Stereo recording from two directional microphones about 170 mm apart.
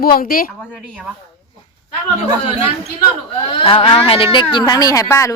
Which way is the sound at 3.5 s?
35° left (ahead or behind).